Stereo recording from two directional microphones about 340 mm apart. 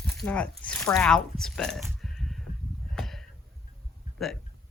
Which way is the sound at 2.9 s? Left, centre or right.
Centre.